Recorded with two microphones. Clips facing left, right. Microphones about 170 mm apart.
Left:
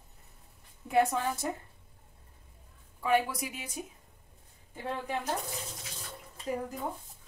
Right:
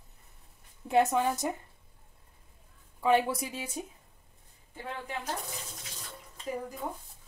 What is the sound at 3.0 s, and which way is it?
Speech, 25° right (ahead or behind).